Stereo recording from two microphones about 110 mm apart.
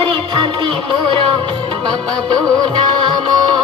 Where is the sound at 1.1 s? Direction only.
55° right (ahead or behind).